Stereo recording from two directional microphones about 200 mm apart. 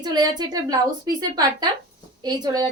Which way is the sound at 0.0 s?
20° right (ahead or behind).